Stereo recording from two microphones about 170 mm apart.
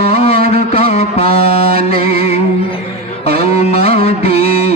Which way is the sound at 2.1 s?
40° left (ahead or behind).